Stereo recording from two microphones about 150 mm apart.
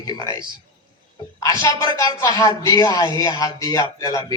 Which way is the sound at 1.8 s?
20° left (ahead or behind).